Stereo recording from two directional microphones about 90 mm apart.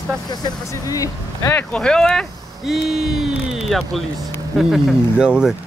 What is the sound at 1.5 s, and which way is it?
Speech, 20° left (ahead or behind).